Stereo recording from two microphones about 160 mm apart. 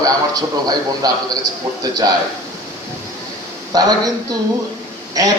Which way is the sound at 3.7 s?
25° right (ahead or behind).